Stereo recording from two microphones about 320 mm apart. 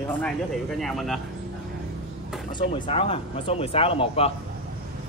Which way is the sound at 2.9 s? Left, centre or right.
Centre.